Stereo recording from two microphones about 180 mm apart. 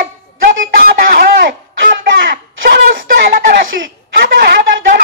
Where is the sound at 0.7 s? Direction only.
55° right (ahead or behind).